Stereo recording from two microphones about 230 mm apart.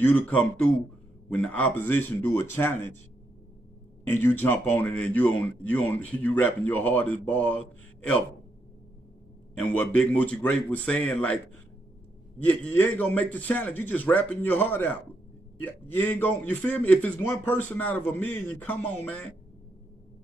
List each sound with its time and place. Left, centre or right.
0.0 s speech: centre
4.1 s speech: centre
9.6 s speech: centre
12.4 s speech: centre